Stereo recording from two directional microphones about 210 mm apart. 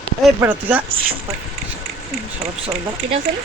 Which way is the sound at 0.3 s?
10° right (ahead or behind).